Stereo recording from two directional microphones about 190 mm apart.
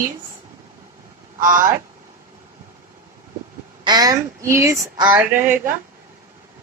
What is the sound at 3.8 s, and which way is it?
Speech, 20° right (ahead or behind).